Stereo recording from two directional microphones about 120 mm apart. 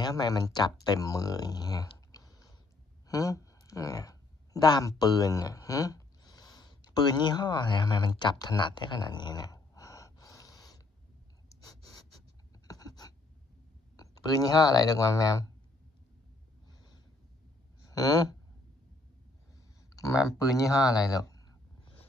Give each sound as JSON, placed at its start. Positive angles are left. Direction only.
{"t": 0.0, "sound": "speech", "side_deg": 35}
{"t": 11.4, "sound": "a sound", "side_deg": 30}
{"t": 13.9, "sound": "speech", "side_deg": 30}
{"t": 16.6, "sound": "snort", "side_deg": 35}
{"t": 17.8, "sound": "speech", "side_deg": 30}
{"t": 20.0, "sound": "speech", "side_deg": 25}